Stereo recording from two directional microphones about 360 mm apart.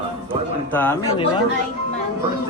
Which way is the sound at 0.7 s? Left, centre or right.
Centre.